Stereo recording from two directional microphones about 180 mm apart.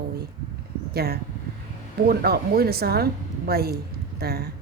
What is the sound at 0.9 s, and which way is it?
Speech, 60° right (ahead or behind).